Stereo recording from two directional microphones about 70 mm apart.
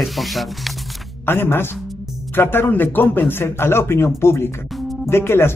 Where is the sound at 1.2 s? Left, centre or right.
Left.